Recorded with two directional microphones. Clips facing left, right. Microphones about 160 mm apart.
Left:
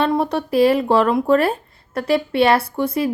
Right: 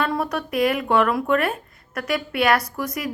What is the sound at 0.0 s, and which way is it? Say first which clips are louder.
A woman's voice: left 5 dB; 25° left (ahead or behind).